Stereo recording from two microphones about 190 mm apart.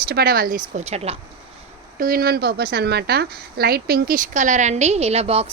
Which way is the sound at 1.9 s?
50° right (ahead or behind).